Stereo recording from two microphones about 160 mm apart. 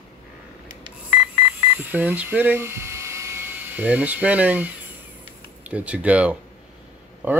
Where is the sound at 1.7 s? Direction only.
10° right (ahead or behind).